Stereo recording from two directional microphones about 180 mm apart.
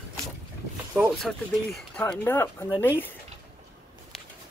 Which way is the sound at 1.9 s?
10° left (ahead or behind).